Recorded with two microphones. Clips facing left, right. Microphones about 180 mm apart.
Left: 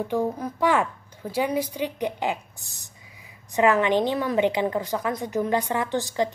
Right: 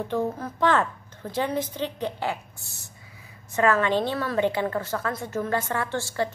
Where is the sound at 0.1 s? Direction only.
10° left (ahead or behind).